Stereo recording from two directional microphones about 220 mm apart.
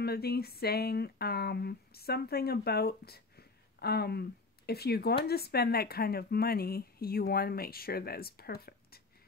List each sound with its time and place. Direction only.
0.0 s speech: 45° left (ahead or behind)